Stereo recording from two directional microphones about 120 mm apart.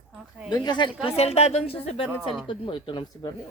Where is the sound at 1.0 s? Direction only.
60° left (ahead or behind); by 3.3 s 40° left (ahead or behind).